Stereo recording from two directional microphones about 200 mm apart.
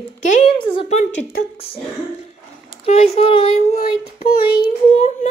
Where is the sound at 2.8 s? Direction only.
30° left (ahead or behind).